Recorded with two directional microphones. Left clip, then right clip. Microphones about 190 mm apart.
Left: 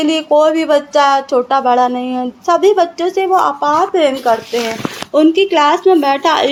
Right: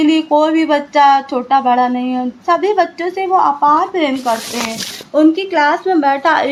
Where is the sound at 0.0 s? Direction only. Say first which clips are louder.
Left 1 dB; 25° left (ahead or behind).